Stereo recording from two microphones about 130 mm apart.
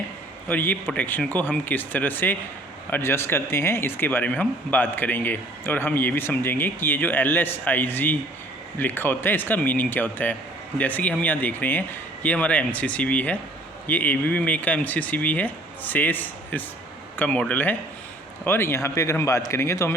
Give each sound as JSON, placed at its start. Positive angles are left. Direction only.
{"t": 0.4, "sound": "a man's voice", "side_deg": 15}